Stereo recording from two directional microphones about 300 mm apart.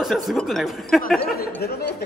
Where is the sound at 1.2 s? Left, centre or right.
Left.